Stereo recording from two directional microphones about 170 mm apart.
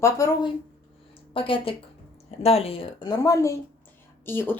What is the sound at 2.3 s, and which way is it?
Speech, 35° left (ahead or behind).